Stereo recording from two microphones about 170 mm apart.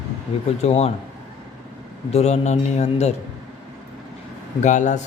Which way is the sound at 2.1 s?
40° left (ahead or behind).